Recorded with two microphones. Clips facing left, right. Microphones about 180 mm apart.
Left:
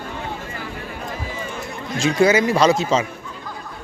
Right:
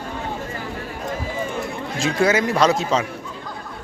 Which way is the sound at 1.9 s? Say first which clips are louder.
Left 3 dB; centre (ahead or behind).